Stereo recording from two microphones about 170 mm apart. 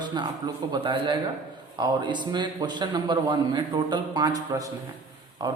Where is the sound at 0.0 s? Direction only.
25° right (ahead or behind).